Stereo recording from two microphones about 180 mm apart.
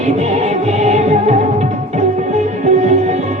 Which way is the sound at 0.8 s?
35° right (ahead or behind).